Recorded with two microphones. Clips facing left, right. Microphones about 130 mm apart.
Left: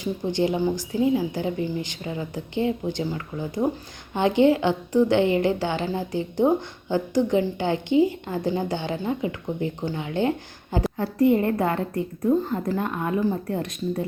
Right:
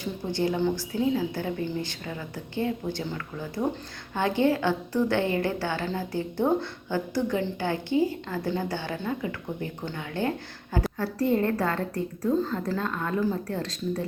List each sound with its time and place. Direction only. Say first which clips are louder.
0.0 s a woman's voice: left 4 dB; 20° left (ahead or behind)